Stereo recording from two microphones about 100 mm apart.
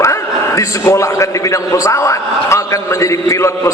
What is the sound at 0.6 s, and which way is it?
A man's voice, 30° left (ahead or behind).